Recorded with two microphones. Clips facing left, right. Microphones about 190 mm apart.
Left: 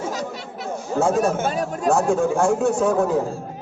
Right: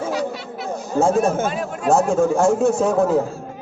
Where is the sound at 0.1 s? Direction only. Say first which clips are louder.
Right 5 dB; 45° left (ahead or behind).